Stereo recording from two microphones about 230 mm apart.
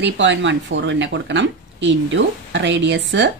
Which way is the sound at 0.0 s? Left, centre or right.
Right.